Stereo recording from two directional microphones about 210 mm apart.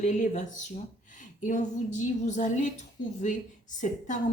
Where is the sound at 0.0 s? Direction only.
35° left (ahead or behind).